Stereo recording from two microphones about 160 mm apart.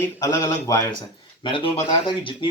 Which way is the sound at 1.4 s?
35° left (ahead or behind).